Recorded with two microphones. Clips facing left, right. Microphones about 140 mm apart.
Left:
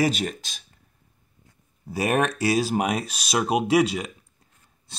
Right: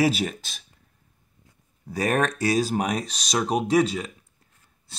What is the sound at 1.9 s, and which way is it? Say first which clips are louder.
Speech: left 1 dB; 10° left (ahead or behind).